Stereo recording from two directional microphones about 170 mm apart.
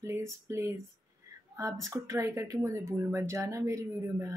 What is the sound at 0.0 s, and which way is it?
Speech, 15° right (ahead or behind).